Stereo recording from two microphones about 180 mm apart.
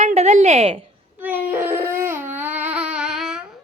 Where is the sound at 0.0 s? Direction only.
35° right (ahead or behind).